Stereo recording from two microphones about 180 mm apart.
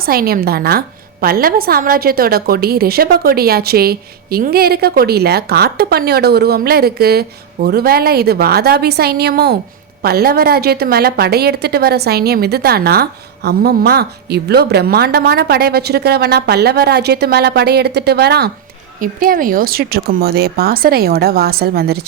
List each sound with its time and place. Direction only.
0.0 s a woman's voice: 55° right (ahead or behind)
18.9 s a woman's voice: 50° right (ahead or behind)